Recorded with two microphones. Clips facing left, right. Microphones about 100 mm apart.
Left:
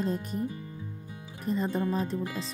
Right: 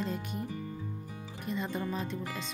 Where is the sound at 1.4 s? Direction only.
40° left (ahead or behind).